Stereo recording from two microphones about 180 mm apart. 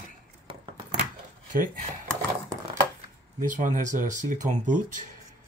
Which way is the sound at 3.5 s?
45° right (ahead or behind).